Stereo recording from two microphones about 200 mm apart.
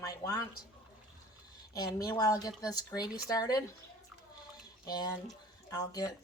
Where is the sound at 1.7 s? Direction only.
15° left (ahead or behind).